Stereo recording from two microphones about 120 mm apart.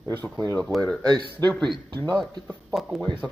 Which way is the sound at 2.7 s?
Centre (ahead or behind).